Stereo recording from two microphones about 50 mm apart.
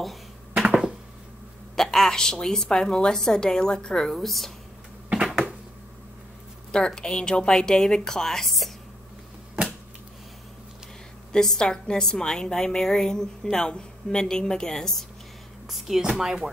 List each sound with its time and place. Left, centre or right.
0.0 s a sound: centre
1.8 s a woman's voice: centre
7.0 s a woman's voice: centre
9.6 s a sound: right
11.3 s a woman's voice: centre
15.7 s speech: centre